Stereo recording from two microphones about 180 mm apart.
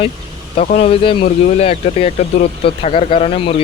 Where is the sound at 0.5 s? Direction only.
35° left (ahead or behind).